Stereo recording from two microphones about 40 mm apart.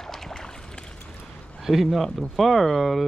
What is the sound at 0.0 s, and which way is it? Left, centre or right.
Boat, centre.